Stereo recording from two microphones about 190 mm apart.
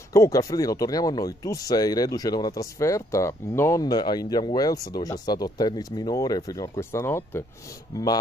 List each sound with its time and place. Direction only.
0.1 s speech: 15° left (ahead or behind)